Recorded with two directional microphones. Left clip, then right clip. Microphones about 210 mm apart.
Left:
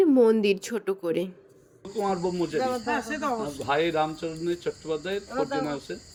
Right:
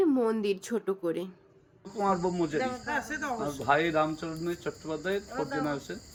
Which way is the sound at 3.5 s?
5° right (ahead or behind).